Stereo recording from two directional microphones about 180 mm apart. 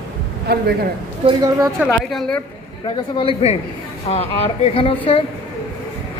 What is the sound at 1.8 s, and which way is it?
Speech, centre (ahead or behind).